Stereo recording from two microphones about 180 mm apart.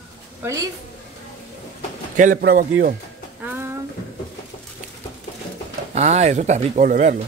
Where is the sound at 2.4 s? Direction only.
55° right (ahead or behind).